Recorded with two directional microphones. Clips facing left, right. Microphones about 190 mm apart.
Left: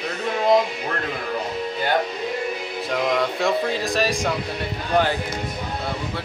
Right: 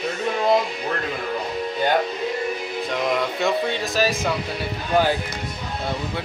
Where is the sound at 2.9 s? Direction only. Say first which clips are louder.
Left 2 dB; centre (ahead or behind).